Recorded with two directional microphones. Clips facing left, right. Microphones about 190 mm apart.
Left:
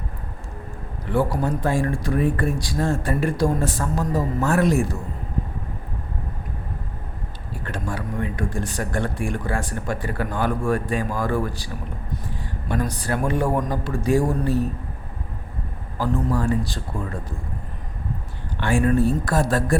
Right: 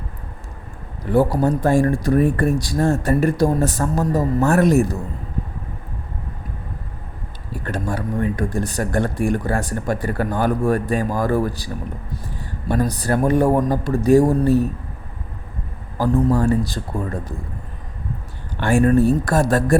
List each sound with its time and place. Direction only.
1.1 s speech: 40° right (ahead or behind)
7.6 s speech: 40° right (ahead or behind)
16.0 s speech: 45° right (ahead or behind)
18.6 s speech: 40° right (ahead or behind)